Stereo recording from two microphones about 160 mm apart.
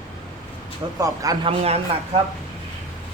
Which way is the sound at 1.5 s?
40° right (ahead or behind).